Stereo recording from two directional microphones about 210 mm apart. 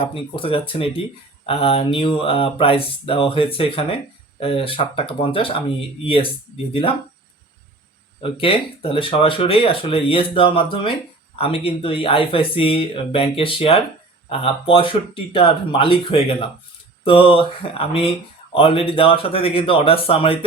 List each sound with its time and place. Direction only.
0.1 s speech: 25° left (ahead or behind)
8.2 s speech: 25° left (ahead or behind)